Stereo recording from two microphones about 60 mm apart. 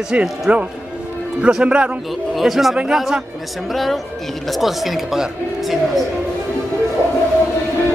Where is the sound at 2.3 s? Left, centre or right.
Centre.